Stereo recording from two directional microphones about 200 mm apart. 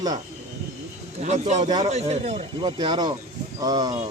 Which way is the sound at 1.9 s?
35° right (ahead or behind).